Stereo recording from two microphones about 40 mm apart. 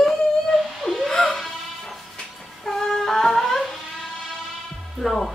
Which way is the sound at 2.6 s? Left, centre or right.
Centre.